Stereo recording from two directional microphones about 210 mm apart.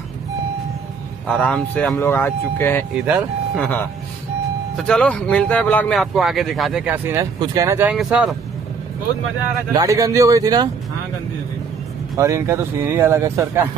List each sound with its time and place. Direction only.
1.2 s speech: 5° left (ahead or behind)
9.7 s speech: 15° right (ahead or behind)
12.2 s speech: 15° right (ahead or behind)